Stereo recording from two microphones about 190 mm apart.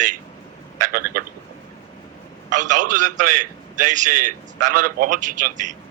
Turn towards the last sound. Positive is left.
turn(degrees=-40)  # may be behind; listen again after turning